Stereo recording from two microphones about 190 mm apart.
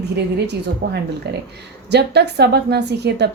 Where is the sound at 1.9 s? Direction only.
60° right (ahead or behind).